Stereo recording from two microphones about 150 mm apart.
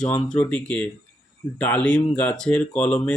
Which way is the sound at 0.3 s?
5° left (ahead or behind).